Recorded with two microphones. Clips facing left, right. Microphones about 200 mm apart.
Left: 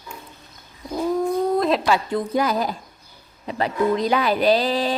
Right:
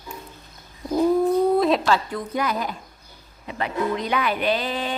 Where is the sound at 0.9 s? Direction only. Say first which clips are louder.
Right 3 dB; 5° right (ahead or behind).